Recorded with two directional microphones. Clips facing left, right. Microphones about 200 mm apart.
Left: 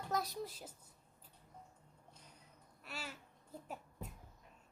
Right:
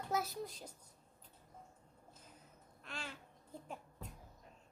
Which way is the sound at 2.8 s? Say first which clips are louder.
Even; 5° left (ahead or behind).